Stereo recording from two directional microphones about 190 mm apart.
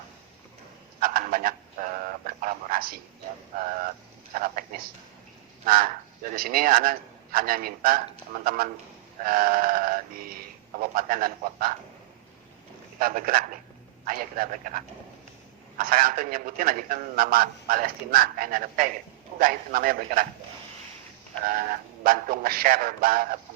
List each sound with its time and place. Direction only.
0.9 s a man's voice: 50° right (ahead or behind)
13.0 s a man's voice: 50° right (ahead or behind)
21.4 s a man's voice: 45° right (ahead or behind)